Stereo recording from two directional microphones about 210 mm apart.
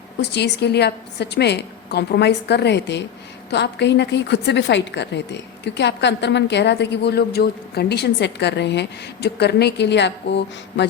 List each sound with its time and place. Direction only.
0.2 s a woman's voice: 55° left (ahead or behind)